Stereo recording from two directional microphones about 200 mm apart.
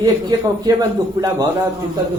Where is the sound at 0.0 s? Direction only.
20° right (ahead or behind).